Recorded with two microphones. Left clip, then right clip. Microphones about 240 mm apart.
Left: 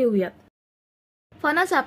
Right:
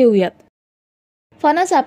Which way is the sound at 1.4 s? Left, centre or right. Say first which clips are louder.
Right 7 dB; right.